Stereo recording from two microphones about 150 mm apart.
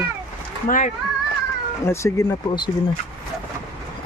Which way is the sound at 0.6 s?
60° left (ahead or behind).